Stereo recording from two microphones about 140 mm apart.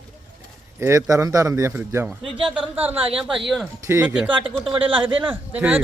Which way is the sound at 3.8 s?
20° right (ahead or behind).